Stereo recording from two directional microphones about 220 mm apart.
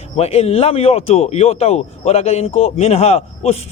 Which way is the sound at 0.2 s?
30° left (ahead or behind).